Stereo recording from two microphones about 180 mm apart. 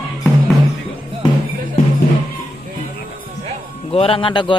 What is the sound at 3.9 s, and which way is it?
Speech, 30° left (ahead or behind).